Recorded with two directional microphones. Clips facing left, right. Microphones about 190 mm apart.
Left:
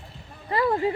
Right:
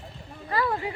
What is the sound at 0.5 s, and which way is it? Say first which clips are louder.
Speech: left 5 dB; 30° left (ahead or behind).